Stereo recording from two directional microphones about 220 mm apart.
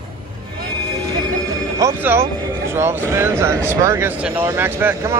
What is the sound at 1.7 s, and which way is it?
Speech, 10° right (ahead or behind).